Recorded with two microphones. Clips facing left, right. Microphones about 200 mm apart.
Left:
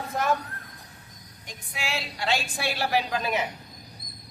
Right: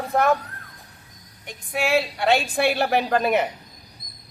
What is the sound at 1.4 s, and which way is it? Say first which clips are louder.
A woman's voice: right 10 dB; 60° right (ahead or behind).